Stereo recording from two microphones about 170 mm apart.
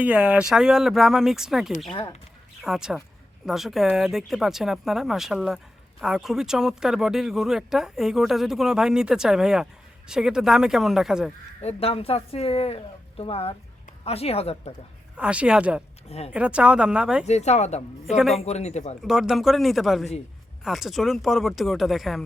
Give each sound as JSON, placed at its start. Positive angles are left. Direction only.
{"t": 0.0, "sound": "speech", "side_deg": -10}
{"t": 1.9, "sound": "speech", "side_deg": 30}
{"t": 2.6, "sound": "speech", "side_deg": 0}
{"t": 11.6, "sound": "speech", "side_deg": 35}
{"t": 15.1, "sound": "speech", "side_deg": -5}
{"t": 16.0, "sound": "speech", "side_deg": 40}
{"t": 16.3, "sound": "speech", "side_deg": -5}
{"t": 17.2, "sound": "speech", "side_deg": 40}
{"t": 18.2, "sound": "speech", "side_deg": 0}
{"t": 18.4, "sound": "speech", "side_deg": 40}
{"t": 19.0, "sound": "speech", "side_deg": -5}